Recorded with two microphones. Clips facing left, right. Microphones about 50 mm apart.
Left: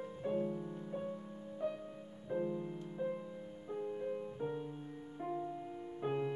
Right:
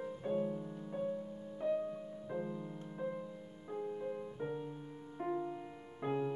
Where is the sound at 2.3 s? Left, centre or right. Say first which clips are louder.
Left 4 dB; centre.